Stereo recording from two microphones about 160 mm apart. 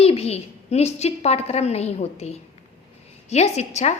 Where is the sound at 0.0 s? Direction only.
40° left (ahead or behind).